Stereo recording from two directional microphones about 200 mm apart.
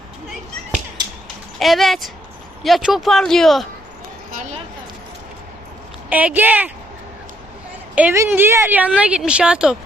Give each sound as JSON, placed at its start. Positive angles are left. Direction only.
{"t": 1.5, "sound": "speech", "side_deg": 0}
{"t": 4.3, "sound": "a sound", "side_deg": -40}
{"t": 6.1, "sound": "speech", "side_deg": -10}
{"t": 7.9, "sound": "speech", "side_deg": -10}